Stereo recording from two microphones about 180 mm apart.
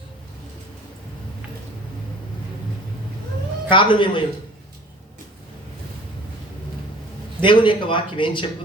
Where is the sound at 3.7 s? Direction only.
25° left (ahead or behind).